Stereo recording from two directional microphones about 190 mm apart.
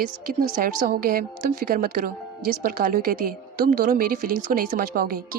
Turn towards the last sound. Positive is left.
turn(degrees=-50)  # may be behind; listen again after turning